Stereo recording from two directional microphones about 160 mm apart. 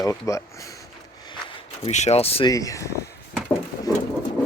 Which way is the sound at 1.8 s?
45° left (ahead or behind).